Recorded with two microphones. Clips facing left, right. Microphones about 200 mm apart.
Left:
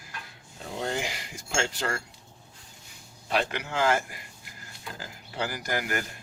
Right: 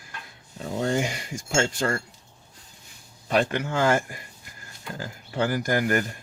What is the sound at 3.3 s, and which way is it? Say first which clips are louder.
Speech: right 5 dB; 50° right (ahead or behind).